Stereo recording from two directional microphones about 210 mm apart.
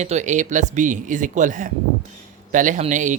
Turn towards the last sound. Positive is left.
turn(degrees=-35)  # may be behind; listen again after turning